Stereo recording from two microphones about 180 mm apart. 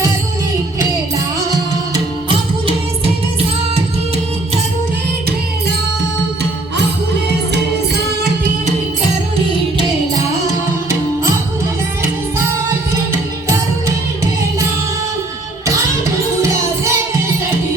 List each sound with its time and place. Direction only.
1.9 s music: 30° right (ahead or behind)
16.4 s music: 15° right (ahead or behind)